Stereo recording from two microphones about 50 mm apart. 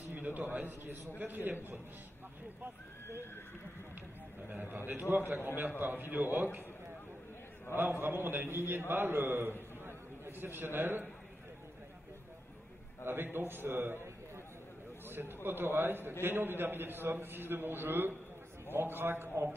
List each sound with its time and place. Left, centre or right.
0.1 s a man's voice: right
4.5 s a man's voice: right
7.7 s a man's voice: right
13.0 s a man's voice: right
15.0 s a sound: right
15.4 s a man's voice: right